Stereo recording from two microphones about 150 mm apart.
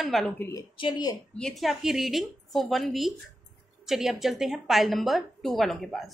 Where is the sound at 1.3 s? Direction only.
5° left (ahead or behind).